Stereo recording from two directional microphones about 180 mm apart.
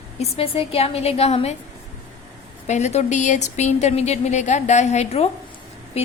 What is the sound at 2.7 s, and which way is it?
A woman's voice, 40° left (ahead or behind).